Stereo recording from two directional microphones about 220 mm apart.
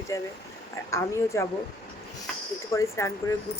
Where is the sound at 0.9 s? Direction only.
15° left (ahead or behind).